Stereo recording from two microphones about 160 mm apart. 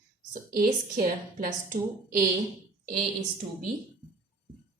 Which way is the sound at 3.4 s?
40° right (ahead or behind).